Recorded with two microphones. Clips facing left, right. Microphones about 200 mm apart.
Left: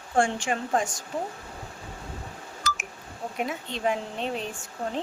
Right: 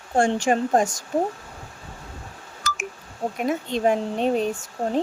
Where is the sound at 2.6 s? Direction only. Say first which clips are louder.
Right 1 dB; 50° right (ahead or behind).